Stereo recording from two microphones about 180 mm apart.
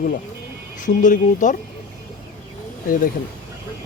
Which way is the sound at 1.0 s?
45° left (ahead or behind).